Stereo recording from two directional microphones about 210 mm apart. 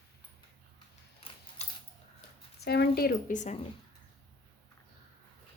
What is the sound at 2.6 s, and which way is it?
Speech, 50° left (ahead or behind).